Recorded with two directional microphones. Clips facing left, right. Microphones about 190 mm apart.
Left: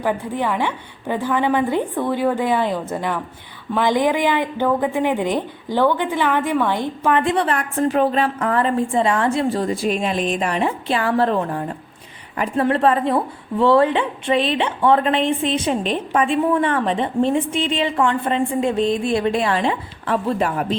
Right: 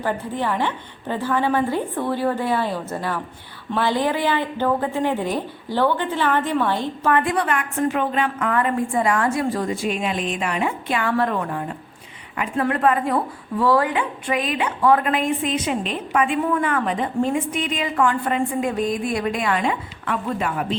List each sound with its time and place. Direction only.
0.0 s a woman's voice: 15° left (ahead or behind); by 20.7 s 40° left (ahead or behind)